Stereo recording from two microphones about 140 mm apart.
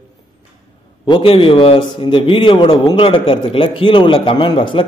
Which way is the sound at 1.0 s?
40° left (ahead or behind).